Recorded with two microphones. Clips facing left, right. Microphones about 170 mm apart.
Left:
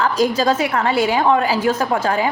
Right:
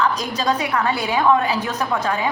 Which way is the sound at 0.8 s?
30° left (ahead or behind).